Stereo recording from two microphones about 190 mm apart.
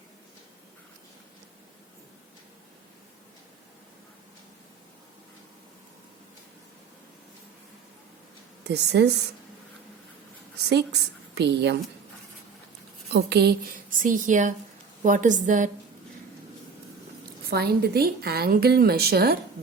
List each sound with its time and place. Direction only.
8.6 s a woman's voice: 60° right (ahead or behind)
11.3 s a woman's voice: 65° right (ahead or behind)
13.1 s a woman's voice: 60° right (ahead or behind); by 15.7 s 40° right (ahead or behind)
17.5 s a woman's voice: 55° right (ahead or behind)